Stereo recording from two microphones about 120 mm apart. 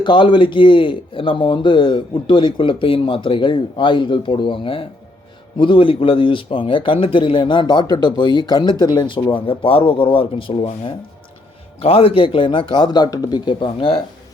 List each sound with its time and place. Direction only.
0.0 s speech: 40° left (ahead or behind)
11.8 s speech: 55° left (ahead or behind)